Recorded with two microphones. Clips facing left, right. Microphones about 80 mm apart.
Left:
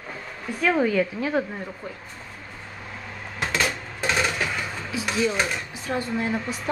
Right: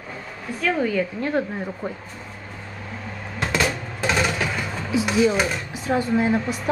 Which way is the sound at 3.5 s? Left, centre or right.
Centre.